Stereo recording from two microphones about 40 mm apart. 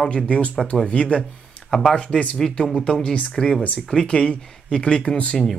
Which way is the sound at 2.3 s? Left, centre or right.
Centre.